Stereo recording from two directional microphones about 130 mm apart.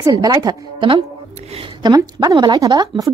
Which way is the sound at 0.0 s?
30° right (ahead or behind).